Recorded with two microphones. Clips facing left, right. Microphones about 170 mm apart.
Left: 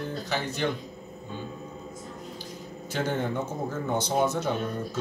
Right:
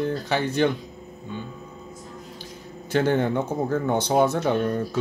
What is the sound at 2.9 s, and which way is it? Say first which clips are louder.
Speech: right 7 dB; 65° right (ahead or behind).